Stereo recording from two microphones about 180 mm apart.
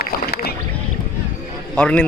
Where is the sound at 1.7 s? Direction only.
5° left (ahead or behind).